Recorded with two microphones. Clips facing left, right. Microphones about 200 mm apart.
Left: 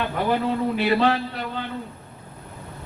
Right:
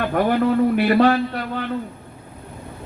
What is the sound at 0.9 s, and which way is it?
Speech, 55° right (ahead or behind).